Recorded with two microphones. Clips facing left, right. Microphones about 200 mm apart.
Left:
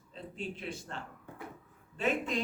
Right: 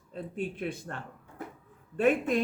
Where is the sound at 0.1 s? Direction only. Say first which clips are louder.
Right 6 dB; 55° right (ahead or behind).